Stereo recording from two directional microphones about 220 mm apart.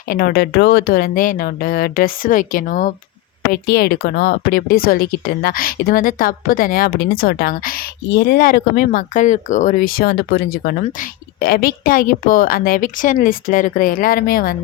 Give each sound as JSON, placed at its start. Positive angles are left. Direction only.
{"t": 0.1, "sound": "speech", "side_deg": 45}